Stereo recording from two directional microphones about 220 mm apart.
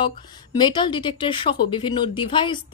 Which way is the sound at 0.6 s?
20° left (ahead or behind).